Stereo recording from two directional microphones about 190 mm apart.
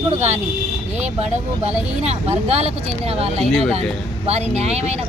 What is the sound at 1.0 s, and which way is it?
Speech, 35° right (ahead or behind).